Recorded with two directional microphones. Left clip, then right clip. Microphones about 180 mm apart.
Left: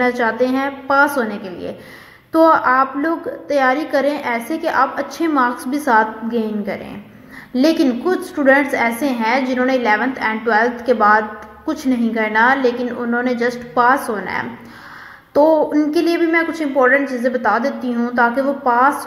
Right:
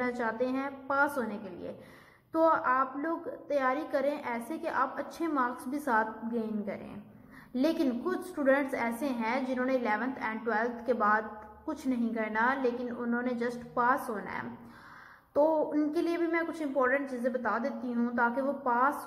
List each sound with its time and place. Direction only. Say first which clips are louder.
0.0 s a woman's voice: left 15 dB; 40° left (ahead or behind)
2.3 s a woman's voice: left 14 dB; 40° left (ahead or behind)
7.5 s a woman's voice: left 14 dB; 35° left (ahead or behind)